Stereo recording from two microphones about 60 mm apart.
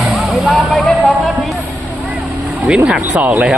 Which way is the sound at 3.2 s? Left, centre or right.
Right.